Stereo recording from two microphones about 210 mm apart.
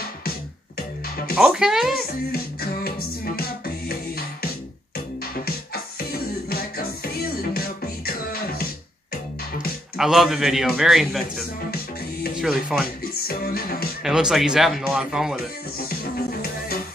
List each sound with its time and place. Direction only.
1.3 s a man's voice: 5° right (ahead or behind)
2.3 s music: 45° left (ahead or behind)
5.3 s music: 45° left (ahead or behind)
9.9 s a man's voice: centre (ahead or behind)
13.0 s music: 45° left (ahead or behind)
14.0 s a man's voice: centre (ahead or behind)
15.8 s music: 45° left (ahead or behind)